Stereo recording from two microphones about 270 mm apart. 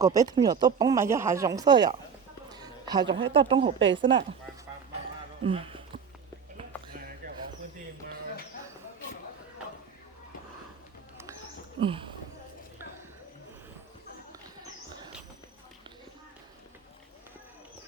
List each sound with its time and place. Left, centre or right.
0.0 s speech: centre
2.5 s a sound: centre
3.3 s speech: centre
5.4 s speech: centre
11.8 s speech: centre